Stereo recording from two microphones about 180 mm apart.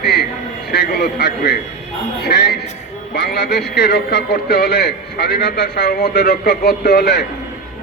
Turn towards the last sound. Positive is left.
turn(degrees=65)  # may be behind; listen again after turning